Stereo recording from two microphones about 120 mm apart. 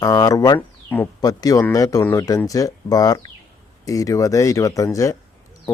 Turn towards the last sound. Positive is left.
turn(degrees=25)  # may be behind; listen again after turning